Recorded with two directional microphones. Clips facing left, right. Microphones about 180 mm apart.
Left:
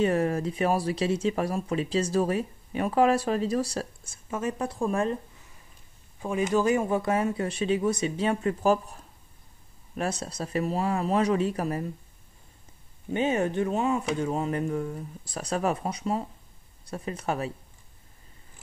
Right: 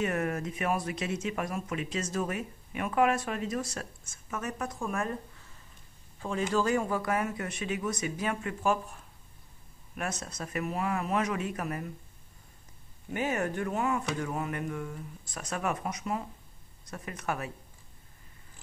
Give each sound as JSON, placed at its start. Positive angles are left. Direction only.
{"t": 0.0, "sound": "speech", "side_deg": 30}
{"t": 6.2, "sound": "speech", "side_deg": 15}
{"t": 13.1, "sound": "speech", "side_deg": 25}